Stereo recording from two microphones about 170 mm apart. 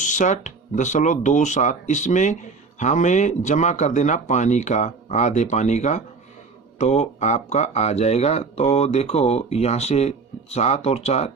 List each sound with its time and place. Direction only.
0.0 s speech: 45° left (ahead or behind)